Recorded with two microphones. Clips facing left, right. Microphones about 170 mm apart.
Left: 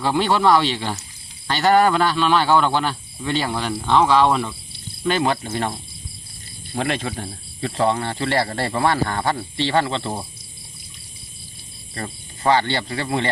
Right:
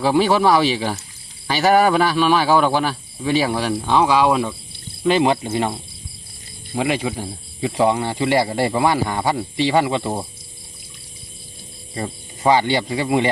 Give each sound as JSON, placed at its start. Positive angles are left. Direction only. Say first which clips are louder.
{"t": 0.0, "sound": "speech", "louder": "right 3 dB", "side_deg": -10}
{"t": 5.0, "sound": "cricket", "louder": "right 4 dB", "side_deg": -15}
{"t": 6.7, "sound": "speech", "louder": "right 3 dB", "side_deg": -10}
{"t": 11.9, "sound": "speech", "louder": "right 4 dB", "side_deg": -10}